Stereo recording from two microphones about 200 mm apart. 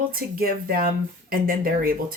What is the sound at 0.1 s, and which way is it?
Speech, 45° right (ahead or behind).